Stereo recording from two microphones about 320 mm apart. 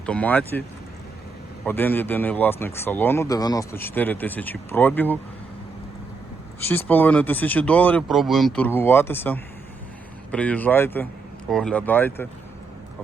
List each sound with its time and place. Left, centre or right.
0.0 s speech: centre
1.6 s speech: centre
6.6 s speech: centre